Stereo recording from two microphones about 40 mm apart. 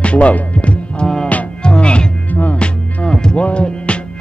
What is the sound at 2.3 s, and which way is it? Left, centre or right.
Music, left.